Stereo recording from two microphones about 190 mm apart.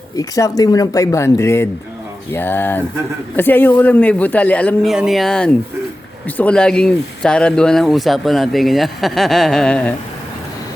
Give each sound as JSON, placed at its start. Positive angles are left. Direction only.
{"t": 0.2, "sound": "speech", "side_deg": 20}